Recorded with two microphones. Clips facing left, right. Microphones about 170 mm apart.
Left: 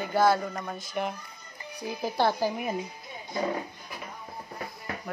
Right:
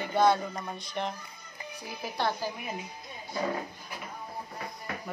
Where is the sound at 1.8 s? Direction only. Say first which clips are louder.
Left 6 dB; 30° left (ahead or behind).